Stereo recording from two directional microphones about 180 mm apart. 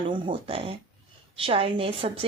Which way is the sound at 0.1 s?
30° right (ahead or behind).